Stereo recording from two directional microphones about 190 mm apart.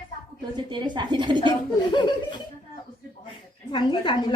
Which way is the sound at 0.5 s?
25° right (ahead or behind).